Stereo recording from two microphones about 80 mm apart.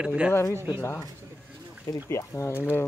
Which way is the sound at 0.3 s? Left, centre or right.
Left.